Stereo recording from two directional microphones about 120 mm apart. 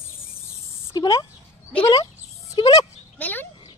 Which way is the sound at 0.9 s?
35° left (ahead or behind).